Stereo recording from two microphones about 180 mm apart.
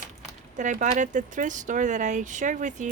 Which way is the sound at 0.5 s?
45° right (ahead or behind).